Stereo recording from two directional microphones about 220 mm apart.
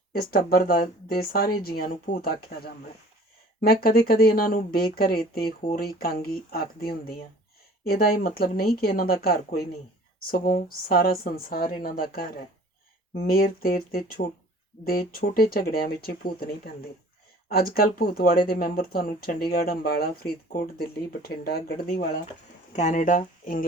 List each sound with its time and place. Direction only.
0.1 s speech: 45° left (ahead or behind)
22.7 s speech: 35° left (ahead or behind)